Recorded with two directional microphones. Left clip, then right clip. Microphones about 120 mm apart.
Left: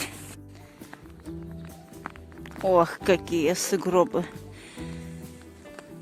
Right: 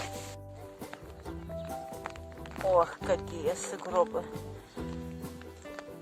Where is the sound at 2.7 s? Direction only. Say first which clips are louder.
Left 5 dB; 50° left (ahead or behind).